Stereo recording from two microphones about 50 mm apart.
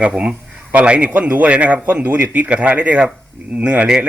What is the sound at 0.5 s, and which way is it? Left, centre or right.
A man's voice, right.